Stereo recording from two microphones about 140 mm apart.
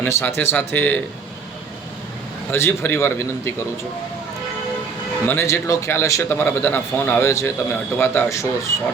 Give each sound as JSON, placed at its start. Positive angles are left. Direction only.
{"t": 0.0, "sound": "a man's voice", "side_deg": 15}
{"t": 2.5, "sound": "a man's voice", "side_deg": 15}
{"t": 5.2, "sound": "a man's voice", "side_deg": 15}